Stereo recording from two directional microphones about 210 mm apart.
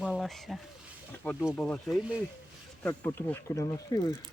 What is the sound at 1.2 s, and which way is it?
Speech, 10° left (ahead or behind).